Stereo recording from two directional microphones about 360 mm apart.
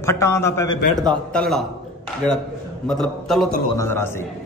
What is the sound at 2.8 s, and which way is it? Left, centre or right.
A man's voice, centre.